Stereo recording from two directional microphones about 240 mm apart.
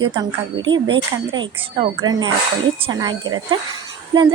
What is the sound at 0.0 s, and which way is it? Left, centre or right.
A woman's voice, centre.